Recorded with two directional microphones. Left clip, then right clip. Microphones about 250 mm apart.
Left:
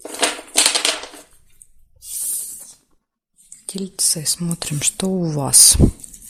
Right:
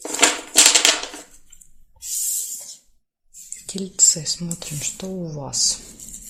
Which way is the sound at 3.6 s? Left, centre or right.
Left.